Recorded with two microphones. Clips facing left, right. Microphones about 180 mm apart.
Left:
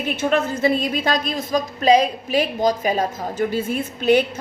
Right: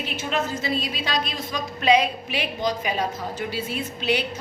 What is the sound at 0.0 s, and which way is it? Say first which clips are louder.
A woman's voice: left 7 dB; 55° left (ahead or behind).